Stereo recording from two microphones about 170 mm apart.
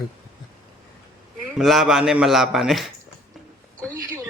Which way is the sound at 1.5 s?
Centre (ahead or behind).